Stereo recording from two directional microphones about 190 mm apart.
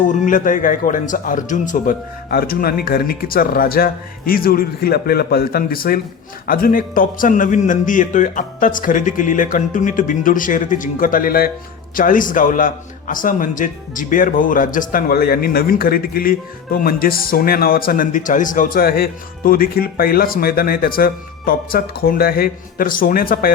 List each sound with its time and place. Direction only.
0.1 s a man's voice: 45° left (ahead or behind)